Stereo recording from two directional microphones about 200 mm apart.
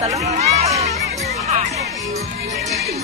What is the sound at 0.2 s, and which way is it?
Music, 35° right (ahead or behind).